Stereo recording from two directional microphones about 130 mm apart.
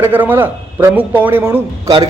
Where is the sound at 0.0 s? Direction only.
15° right (ahead or behind).